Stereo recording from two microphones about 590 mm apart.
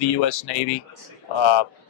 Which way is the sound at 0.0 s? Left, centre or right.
Left.